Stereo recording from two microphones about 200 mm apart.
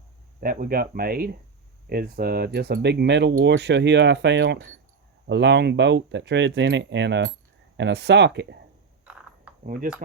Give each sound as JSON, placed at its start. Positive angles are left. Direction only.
{"t": 0.3, "sound": "speech", "side_deg": -45}
{"t": 9.6, "sound": "speech", "side_deg": -45}